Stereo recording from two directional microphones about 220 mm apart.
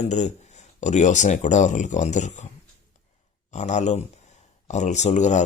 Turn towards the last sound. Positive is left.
turn(degrees=35)  # may be behind; listen again after turning